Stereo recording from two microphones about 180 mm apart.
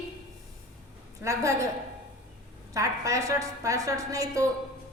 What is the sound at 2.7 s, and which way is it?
A woman's voice, 20° right (ahead or behind).